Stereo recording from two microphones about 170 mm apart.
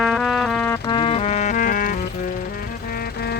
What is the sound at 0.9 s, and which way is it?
Music, 30° left (ahead or behind).